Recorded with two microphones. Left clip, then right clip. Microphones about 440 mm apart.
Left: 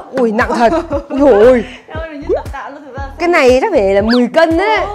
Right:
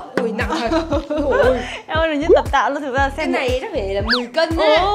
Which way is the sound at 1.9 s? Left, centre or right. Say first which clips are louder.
Right 7 dB; right.